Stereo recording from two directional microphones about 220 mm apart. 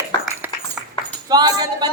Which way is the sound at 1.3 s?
20° right (ahead or behind).